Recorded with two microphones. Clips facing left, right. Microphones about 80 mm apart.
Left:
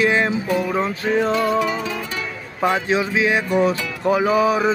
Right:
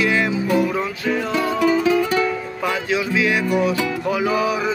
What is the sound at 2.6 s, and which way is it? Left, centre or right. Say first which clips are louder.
Music: left 3 dB; left.